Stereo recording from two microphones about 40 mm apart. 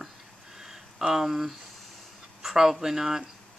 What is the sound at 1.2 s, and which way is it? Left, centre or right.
Speech, centre.